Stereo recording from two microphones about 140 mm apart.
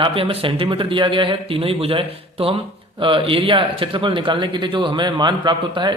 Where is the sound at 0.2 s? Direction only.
40° right (ahead or behind).